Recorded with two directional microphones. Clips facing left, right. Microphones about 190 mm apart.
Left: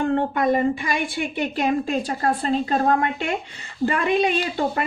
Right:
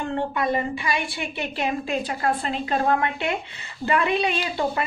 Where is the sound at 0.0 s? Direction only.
50° left (ahead or behind).